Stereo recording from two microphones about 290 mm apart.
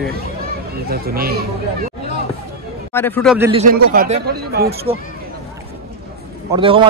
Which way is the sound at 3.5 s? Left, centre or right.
Right.